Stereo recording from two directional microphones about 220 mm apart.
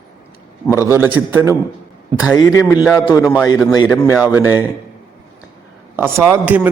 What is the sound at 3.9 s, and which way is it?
Speech, 10° left (ahead or behind).